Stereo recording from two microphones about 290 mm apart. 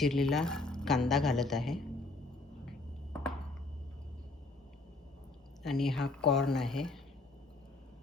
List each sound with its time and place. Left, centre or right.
0.0 s a woman's voice: centre
5.6 s a woman's voice: centre